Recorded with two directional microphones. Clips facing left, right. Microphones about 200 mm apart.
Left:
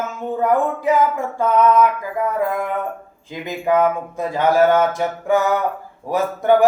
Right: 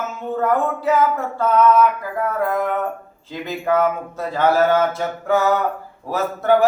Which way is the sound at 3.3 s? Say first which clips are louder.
Left 1 dB; 15° left (ahead or behind).